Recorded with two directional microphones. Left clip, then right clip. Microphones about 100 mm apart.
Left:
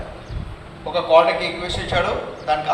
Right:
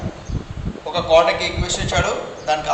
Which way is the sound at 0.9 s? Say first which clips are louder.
Even; 75° right (ahead or behind).